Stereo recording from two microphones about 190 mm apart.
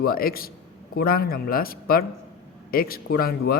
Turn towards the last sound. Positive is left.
turn(degrees=50)  # may be behind; listen again after turning